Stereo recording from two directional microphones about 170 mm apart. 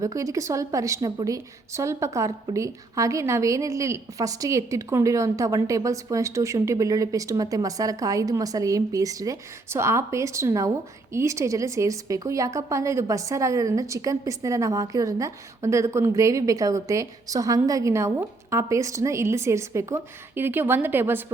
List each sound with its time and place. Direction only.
0.0 s a woman's voice: 20° right (ahead or behind)